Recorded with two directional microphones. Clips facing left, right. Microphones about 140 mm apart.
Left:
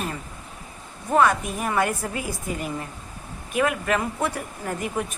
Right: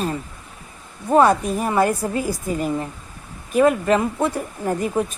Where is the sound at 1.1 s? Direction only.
35° right (ahead or behind).